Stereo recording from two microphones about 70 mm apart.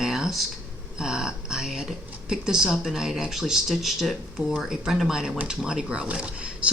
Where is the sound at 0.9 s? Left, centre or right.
Centre.